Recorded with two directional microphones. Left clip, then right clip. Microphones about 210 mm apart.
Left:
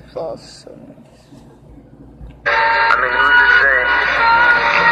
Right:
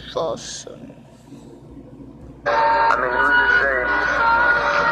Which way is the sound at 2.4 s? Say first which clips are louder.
Left 3 dB; centre (ahead or behind).